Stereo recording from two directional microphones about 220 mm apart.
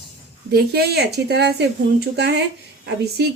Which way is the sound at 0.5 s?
45° right (ahead or behind).